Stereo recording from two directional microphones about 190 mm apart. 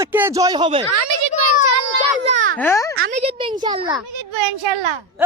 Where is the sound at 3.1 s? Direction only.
35° right (ahead or behind).